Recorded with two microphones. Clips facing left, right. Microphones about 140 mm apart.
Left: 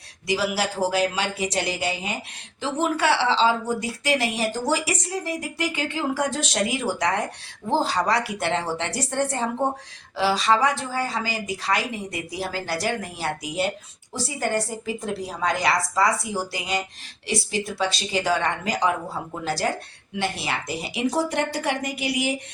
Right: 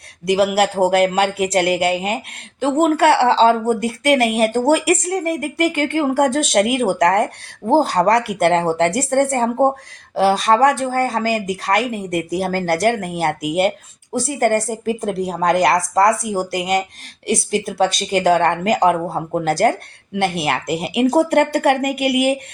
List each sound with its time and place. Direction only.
0.3 s speech: 60° right (ahead or behind)